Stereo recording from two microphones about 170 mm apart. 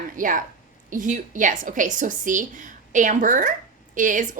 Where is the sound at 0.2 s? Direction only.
50° right (ahead or behind).